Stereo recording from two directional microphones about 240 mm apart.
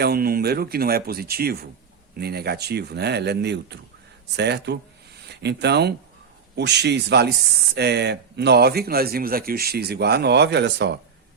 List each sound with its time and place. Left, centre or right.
0.0 s speech: right